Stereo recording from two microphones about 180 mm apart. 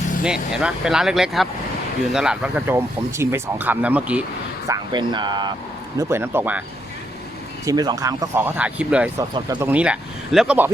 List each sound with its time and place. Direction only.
0.2 s speech: 5° right (ahead or behind)
4.7 s speech: 25° right (ahead or behind)
6.0 s speech: 15° right (ahead or behind)
7.6 s speech: 20° right (ahead or behind)
9.1 s speech: 20° right (ahead or behind)
9.6 s speech: 5° right (ahead or behind)